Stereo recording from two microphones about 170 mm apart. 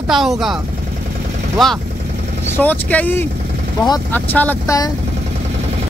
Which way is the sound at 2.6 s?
10° left (ahead or behind).